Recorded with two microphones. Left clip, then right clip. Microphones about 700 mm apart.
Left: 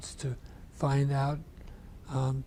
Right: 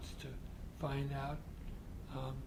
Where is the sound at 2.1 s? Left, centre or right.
Left.